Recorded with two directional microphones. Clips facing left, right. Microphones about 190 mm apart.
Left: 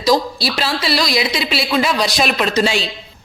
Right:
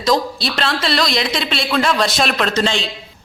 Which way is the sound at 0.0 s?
5° left (ahead or behind).